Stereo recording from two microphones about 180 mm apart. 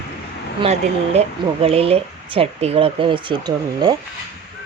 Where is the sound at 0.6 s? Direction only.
35° right (ahead or behind).